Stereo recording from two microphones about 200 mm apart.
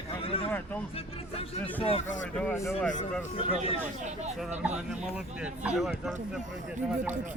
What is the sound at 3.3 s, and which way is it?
Speech, 25° left (ahead or behind).